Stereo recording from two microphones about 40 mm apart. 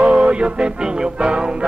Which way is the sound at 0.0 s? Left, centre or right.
Right.